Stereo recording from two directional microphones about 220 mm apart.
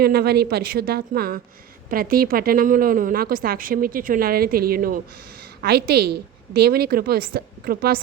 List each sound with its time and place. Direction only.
0.0 s a woman's voice: 45° right (ahead or behind)